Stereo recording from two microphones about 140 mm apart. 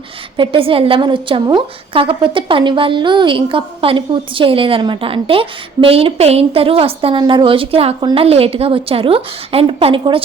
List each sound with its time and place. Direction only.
0.3 s a woman's voice: 40° right (ahead or behind)